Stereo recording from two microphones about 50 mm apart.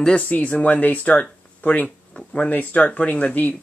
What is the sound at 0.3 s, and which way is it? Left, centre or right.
Speech, left.